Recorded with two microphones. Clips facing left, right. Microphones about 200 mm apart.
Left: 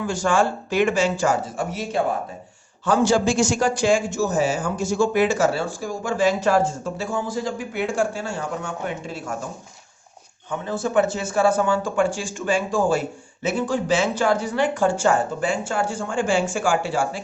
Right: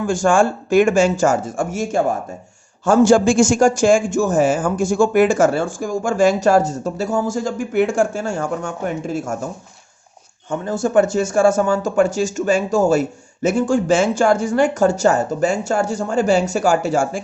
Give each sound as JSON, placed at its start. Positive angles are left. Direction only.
{"t": 0.0, "sound": "speech", "side_deg": -50}
{"t": 10.5, "sound": "speech", "side_deg": -45}